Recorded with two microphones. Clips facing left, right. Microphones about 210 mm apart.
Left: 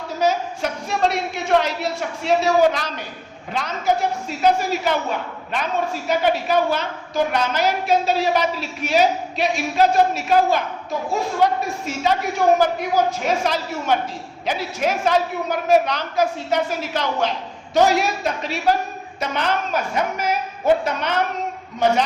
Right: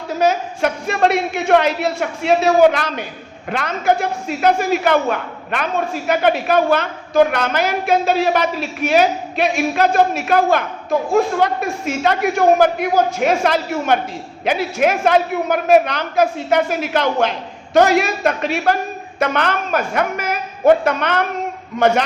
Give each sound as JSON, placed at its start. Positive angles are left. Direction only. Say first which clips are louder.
{"t": 0.2, "sound": "a man's voice", "louder": "right 4 dB", "side_deg": -55}